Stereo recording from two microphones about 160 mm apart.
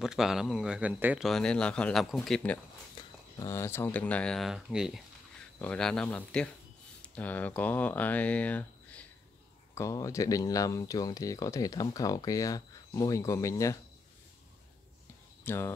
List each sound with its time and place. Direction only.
0.0 s speech: 5° right (ahead or behind)
1.2 s speech: 5° left (ahead or behind)
3.3 s speech: 20° left (ahead or behind)
9.8 s speech: 20° left (ahead or behind)
15.4 s speech: 15° left (ahead or behind)